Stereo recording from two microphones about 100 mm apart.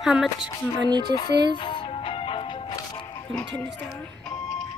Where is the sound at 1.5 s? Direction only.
55° left (ahead or behind).